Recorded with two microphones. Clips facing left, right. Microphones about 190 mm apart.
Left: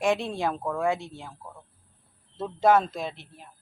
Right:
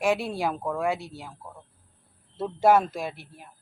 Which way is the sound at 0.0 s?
5° right (ahead or behind).